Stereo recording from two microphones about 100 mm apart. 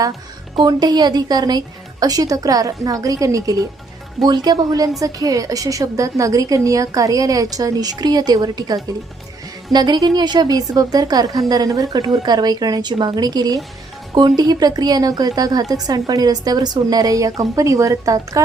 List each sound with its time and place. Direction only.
0.5 s a woman's voice: 45° right (ahead or behind)